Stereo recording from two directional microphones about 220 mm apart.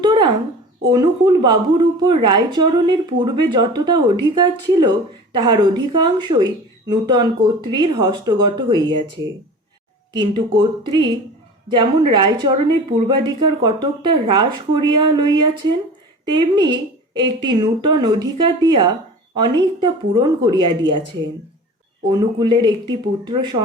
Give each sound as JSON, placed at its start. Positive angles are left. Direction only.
{"t": 0.0, "sound": "a sound", "side_deg": -20}
{"t": 0.9, "sound": "a woman's voice", "side_deg": -20}
{"t": 22.1, "sound": "a woman's voice", "side_deg": -20}